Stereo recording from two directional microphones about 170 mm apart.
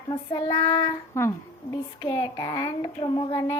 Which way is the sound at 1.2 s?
15° left (ahead or behind).